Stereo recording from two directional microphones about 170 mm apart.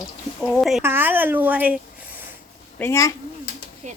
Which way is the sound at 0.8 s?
10° right (ahead or behind).